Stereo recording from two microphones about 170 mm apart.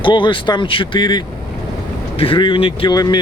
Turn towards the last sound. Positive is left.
turn(degrees=25)  # may be behind; listen again after turning